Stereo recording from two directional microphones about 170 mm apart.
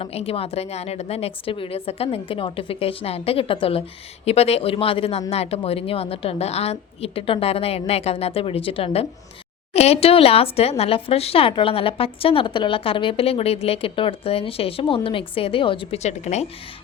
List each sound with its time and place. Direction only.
0.0 s speech: 35° left (ahead or behind)